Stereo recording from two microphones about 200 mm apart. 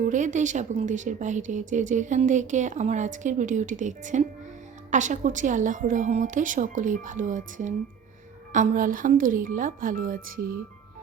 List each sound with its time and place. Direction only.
0.0 s speech: 40° right (ahead or behind)